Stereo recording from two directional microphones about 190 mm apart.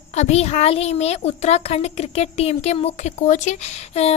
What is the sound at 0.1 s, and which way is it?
A woman's voice, 35° left (ahead or behind).